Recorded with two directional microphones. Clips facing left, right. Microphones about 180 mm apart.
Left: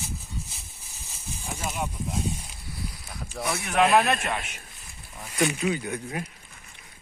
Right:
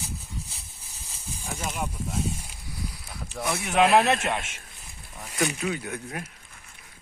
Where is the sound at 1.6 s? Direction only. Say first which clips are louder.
Left 1 dB; 10° left (ahead or behind).